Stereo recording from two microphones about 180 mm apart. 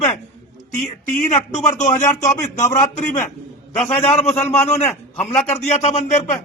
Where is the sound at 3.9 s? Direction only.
35° left (ahead or behind).